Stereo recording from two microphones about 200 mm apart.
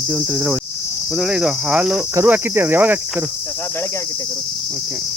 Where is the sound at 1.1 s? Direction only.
5° right (ahead or behind).